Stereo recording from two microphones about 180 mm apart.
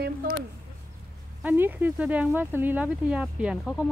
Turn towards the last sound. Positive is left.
turn(degrees=-5)  # may be behind; listen again after turning